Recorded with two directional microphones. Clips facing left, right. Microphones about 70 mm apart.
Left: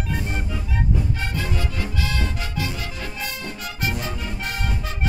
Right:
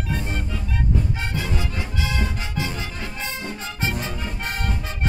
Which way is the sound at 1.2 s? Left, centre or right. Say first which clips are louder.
Even; centre.